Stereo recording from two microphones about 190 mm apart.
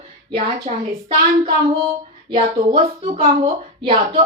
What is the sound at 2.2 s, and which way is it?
Speech, 30° right (ahead or behind).